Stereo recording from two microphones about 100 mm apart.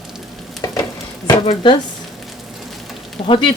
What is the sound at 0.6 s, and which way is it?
Frying, 35° left (ahead or behind).